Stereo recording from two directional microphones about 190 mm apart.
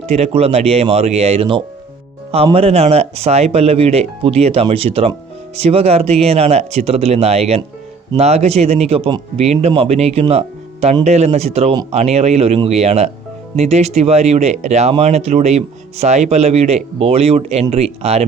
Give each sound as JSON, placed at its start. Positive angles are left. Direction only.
{"t": 0.1, "sound": "speech", "side_deg": -35}